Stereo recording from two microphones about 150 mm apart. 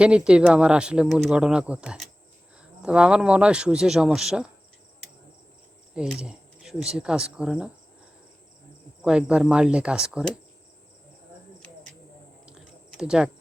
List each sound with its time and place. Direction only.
0.0 s speech: 5° right (ahead or behind)
5.9 s speech: 5° right (ahead or behind)
9.0 s speech: 5° right (ahead or behind)
12.5 s typing: 5° right (ahead or behind)